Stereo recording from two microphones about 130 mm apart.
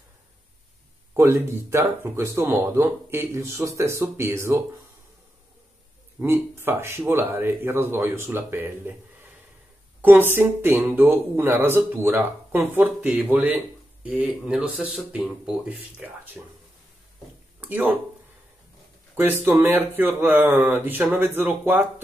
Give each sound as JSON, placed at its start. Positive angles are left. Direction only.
{"t": 1.1, "sound": "speech", "side_deg": -20}
{"t": 6.1, "sound": "speech", "side_deg": -20}
{"t": 17.6, "sound": "speech", "side_deg": -10}
{"t": 19.1, "sound": "speech", "side_deg": -15}